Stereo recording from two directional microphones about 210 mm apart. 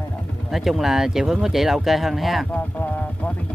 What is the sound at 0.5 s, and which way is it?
Speech, centre (ahead or behind).